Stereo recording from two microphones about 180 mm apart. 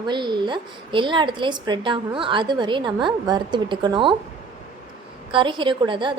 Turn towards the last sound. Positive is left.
turn(degrees=-25)  # may be behind; listen again after turning